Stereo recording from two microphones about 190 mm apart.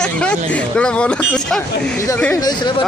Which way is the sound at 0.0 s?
5° left (ahead or behind).